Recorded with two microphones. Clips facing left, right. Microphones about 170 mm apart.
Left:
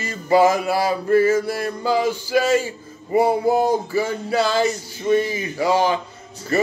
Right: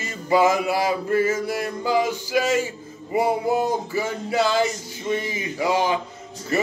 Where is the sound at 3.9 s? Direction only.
15° right (ahead or behind).